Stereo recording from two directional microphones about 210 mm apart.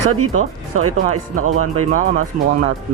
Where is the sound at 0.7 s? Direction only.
90° right.